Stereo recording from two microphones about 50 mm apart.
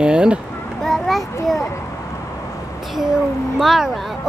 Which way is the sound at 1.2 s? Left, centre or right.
Left.